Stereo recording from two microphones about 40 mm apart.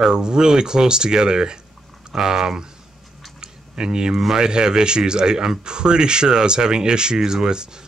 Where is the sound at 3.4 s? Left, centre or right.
Right.